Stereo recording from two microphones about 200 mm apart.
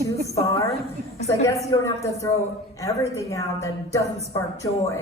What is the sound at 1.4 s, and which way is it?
A woman's voice, 15° left (ahead or behind).